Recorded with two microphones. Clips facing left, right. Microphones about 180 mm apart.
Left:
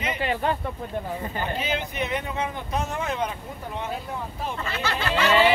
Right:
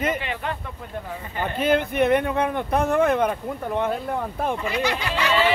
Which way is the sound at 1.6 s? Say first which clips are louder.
Right 14 dB; 55° right (ahead or behind).